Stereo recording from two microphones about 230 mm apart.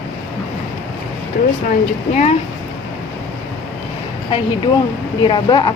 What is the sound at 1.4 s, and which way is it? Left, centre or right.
Speech, left.